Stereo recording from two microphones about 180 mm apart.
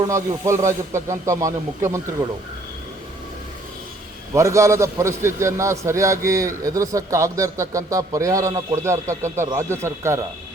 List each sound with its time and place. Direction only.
0.0 s a man's voice: 15° right (ahead or behind)
4.4 s a man's voice: 15° right (ahead or behind)